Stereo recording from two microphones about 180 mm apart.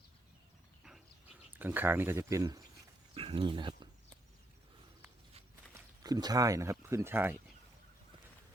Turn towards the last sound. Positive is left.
turn(degrees=-10)  # may be behind; listen again after turning